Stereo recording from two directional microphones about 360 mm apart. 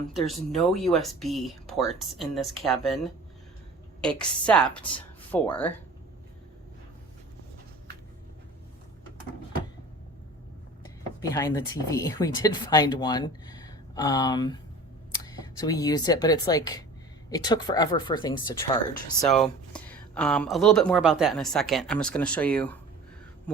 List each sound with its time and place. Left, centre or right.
0.1 s speech: centre
11.2 s speech: centre